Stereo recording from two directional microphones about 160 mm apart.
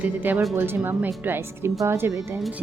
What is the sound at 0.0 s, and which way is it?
Speech, 10° right (ahead or behind).